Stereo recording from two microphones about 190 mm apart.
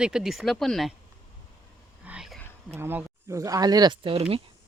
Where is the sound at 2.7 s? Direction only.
10° right (ahead or behind); by 4.4 s 30° right (ahead or behind).